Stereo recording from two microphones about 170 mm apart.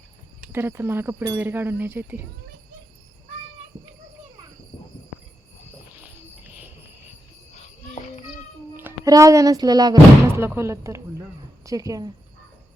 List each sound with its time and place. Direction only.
0.5 s speech: 15° right (ahead or behind)
6.0 s cricket: 10° right (ahead or behind)
7.5 s cricket: 40° left (ahead or behind)
8.7 s a woman's voice: 15° right (ahead or behind)